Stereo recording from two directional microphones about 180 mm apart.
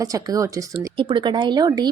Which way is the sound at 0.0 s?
20° right (ahead or behind).